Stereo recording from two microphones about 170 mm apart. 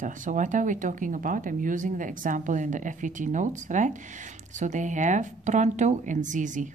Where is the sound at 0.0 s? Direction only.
50° right (ahead or behind).